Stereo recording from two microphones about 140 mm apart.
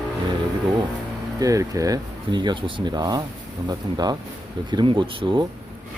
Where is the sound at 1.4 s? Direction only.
25° right (ahead or behind).